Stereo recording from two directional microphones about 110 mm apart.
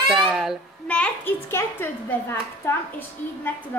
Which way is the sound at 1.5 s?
20° left (ahead or behind).